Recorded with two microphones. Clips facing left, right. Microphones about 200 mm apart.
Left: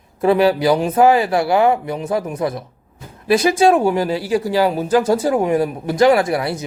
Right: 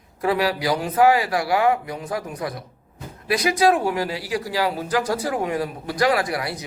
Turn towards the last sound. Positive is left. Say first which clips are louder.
# left 7 dB
turn(degrees=25)  # may be behind; listen again after turning